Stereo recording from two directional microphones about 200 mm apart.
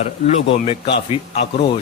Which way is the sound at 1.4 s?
65° left (ahead or behind).